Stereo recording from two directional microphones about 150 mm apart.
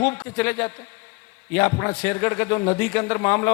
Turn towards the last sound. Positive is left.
turn(degrees=15)  # may be behind; listen again after turning